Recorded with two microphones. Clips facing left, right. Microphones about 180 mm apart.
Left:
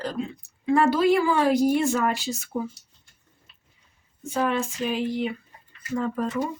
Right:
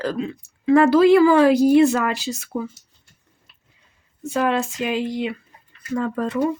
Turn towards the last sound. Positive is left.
turn(degrees=-65)  # may be behind; listen again after turning